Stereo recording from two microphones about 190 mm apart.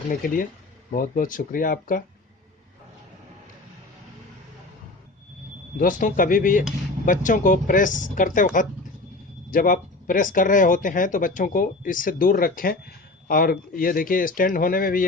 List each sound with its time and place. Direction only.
0.2 s speech: 45° left (ahead or behind)
5.8 s speech: 45° left (ahead or behind)
9.5 s speech: 45° left (ahead or behind)